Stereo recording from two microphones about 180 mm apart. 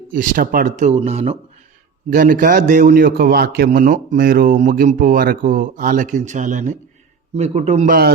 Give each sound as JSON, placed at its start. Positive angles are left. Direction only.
{"t": 0.1, "sound": "speech", "side_deg": -50}
{"t": 1.0, "sound": "a man's voice", "side_deg": -35}
{"t": 2.1, "sound": "speech", "side_deg": -50}
{"t": 2.9, "sound": "a man's voice", "side_deg": -60}
{"t": 3.7, "sound": "a man's voice", "side_deg": -45}
{"t": 7.9, "sound": "a man's voice", "side_deg": -60}